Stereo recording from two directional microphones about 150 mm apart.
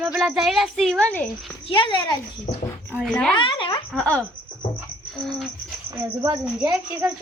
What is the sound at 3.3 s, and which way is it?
Speech, 35° left (ahead or behind).